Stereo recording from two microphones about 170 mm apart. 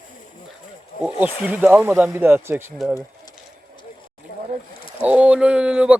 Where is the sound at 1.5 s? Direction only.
10° right (ahead or behind).